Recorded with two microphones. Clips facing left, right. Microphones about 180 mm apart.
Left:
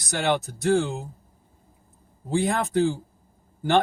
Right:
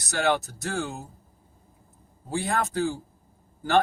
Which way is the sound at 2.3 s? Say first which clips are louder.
Left 4 dB; 20° left (ahead or behind).